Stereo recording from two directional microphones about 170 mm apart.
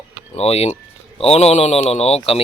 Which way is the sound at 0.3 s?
40° left (ahead or behind).